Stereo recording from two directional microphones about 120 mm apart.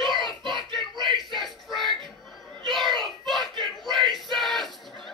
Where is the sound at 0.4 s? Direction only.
40° right (ahead or behind).